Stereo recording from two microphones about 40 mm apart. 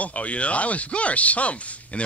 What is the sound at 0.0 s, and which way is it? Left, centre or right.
Speech, left.